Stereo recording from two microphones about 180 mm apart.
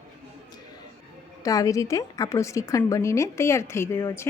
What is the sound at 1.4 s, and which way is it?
A woman's voice, 20° left (ahead or behind).